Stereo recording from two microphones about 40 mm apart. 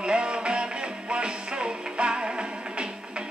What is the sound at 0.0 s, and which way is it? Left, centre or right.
Music, right.